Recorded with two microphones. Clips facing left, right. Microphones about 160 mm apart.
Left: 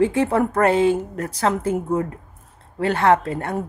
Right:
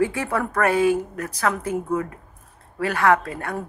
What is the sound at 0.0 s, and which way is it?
A woman's voice, 25° left (ahead or behind).